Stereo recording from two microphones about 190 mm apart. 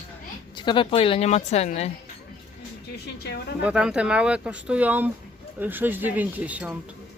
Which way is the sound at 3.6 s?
5° right (ahead or behind).